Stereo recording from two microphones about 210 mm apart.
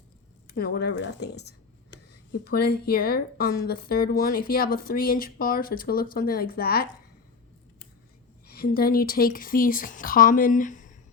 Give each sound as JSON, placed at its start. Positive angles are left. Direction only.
{"t": 0.5, "sound": "a woman's voice", "side_deg": 50}
{"t": 8.4, "sound": "speech", "side_deg": 45}